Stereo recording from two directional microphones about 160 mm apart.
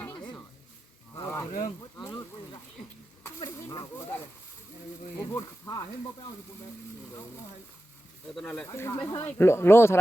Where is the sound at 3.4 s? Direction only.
25° left (ahead or behind).